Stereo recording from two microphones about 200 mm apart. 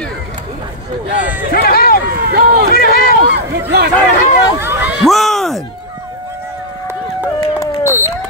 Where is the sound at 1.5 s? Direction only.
50° left (ahead or behind).